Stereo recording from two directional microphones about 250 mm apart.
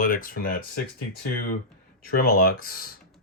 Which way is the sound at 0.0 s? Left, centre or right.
Left.